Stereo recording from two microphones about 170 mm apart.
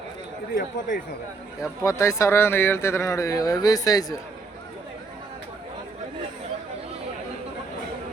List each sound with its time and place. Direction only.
0.5 s speech: 55° left (ahead or behind)
1.8 s speech: 20° left (ahead or behind)